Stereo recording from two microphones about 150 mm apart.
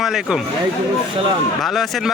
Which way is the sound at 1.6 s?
Centre (ahead or behind).